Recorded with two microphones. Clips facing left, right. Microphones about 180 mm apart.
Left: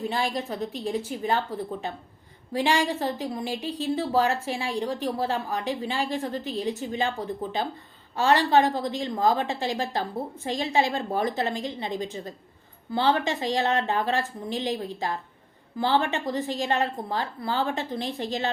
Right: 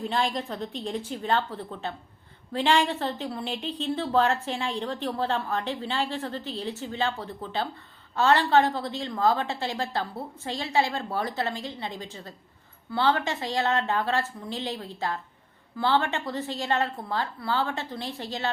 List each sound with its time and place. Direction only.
0.0 s a woman's voice: 5° left (ahead or behind)